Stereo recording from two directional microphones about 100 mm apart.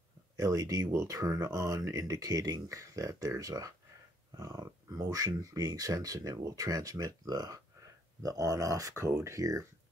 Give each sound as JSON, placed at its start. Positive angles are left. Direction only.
{"t": 0.4, "sound": "speech", "side_deg": -35}